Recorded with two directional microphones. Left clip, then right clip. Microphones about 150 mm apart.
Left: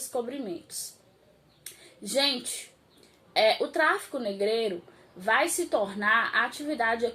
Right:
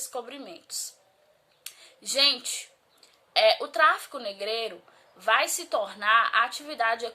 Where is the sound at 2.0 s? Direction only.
25° right (ahead or behind).